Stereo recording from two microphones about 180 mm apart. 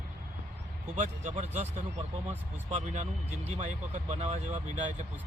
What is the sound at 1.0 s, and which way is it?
Speech, 40° right (ahead or behind).